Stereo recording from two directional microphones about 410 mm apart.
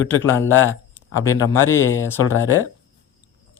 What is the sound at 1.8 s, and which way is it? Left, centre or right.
Speech, left.